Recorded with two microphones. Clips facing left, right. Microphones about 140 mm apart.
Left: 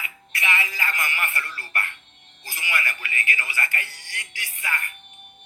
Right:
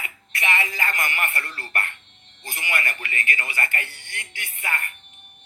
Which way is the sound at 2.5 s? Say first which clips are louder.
Right 1 dB; 50° right (ahead or behind).